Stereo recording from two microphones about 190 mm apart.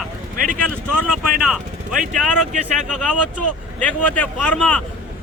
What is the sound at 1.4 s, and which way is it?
Speech, 5° right (ahead or behind).